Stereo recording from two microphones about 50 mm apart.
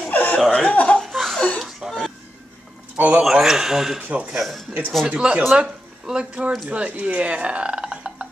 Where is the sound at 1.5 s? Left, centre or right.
Centre.